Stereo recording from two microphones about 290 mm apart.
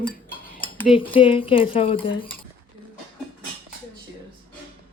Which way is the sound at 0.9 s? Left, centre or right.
Centre.